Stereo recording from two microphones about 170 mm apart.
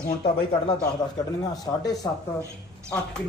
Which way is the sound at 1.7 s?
15° left (ahead or behind).